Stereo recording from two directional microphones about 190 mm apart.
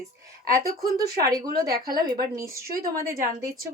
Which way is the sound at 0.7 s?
20° right (ahead or behind).